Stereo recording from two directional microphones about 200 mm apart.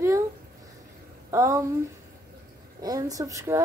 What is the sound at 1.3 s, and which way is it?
Speech, 15° right (ahead or behind).